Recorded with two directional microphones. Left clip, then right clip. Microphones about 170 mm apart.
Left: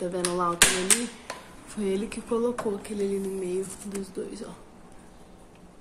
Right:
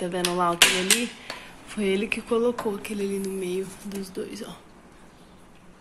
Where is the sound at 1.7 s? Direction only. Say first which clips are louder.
Right 4 dB; 20° right (ahead or behind).